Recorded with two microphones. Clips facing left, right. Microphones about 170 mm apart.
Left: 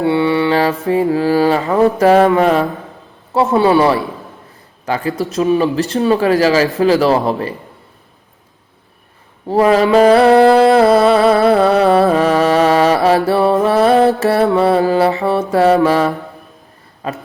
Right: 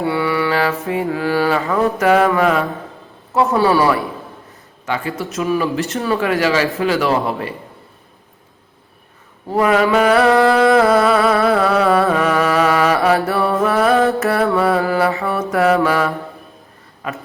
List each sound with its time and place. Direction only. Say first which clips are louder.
0.0 s music: left 5 dB; 25° left (ahead or behind)
3.3 s a man's voice: left 3 dB; 25° left (ahead or behind)
4.9 s speech: left 4 dB; 35° left (ahead or behind)
9.5 s a sound: left 4 dB; 35° left (ahead or behind)
17.0 s speech: left 3 dB; 30° left (ahead or behind)